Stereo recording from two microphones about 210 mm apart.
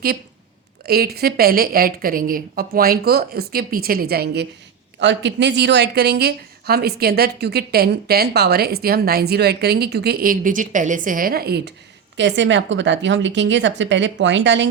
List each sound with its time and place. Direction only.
0.9 s a woman's voice: 50° right (ahead or behind)